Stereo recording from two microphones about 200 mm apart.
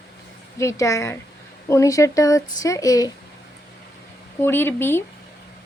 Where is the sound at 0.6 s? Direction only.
15° left (ahead or behind).